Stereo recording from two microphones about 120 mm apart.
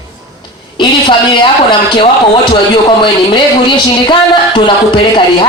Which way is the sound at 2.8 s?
40° left (ahead or behind).